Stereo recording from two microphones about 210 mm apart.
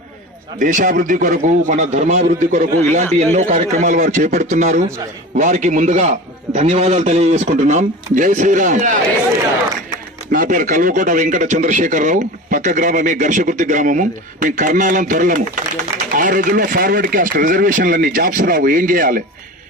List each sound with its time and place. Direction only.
0.6 s speech: 40° right (ahead or behind)
10.3 s speech: 40° right (ahead or behind)